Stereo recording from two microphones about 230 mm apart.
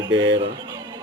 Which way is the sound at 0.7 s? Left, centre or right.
Centre.